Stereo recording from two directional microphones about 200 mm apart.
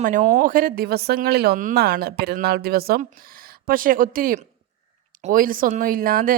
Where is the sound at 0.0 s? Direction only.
40° right (ahead or behind).